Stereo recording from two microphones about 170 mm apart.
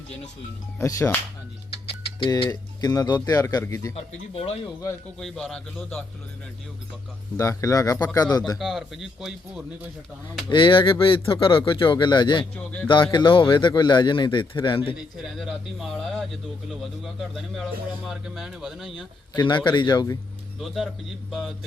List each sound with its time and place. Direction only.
0.8 s speech: 15° left (ahead or behind)
1.9 s speech: 30° left (ahead or behind)
3.9 s speech: 35° left (ahead or behind)
5.2 s speech: centre (ahead or behind)
7.3 s a man's voice: 20° left (ahead or behind)
8.5 s speech: centre (ahead or behind)
10.5 s a man's voice: 30° left (ahead or behind)
12.5 s speech: 10° left (ahead or behind)
12.9 s a man's voice: 25° left (ahead or behind)
15.2 s speech: centre (ahead or behind)
19.4 s a man's voice: 25° left (ahead or behind)
20.6 s speech: centre (ahead or behind)